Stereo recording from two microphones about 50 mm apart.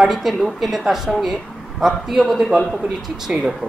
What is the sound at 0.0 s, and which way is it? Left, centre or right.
A man's voice, centre.